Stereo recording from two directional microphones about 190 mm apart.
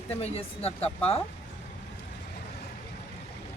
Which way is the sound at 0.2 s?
30° left (ahead or behind).